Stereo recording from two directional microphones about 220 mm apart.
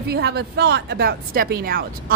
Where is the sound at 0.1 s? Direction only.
45° right (ahead or behind).